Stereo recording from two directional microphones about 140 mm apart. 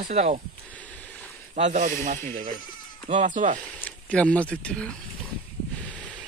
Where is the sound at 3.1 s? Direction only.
60° right (ahead or behind).